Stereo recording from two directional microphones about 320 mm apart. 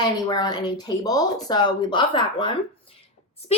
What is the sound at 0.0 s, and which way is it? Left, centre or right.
Speech, centre.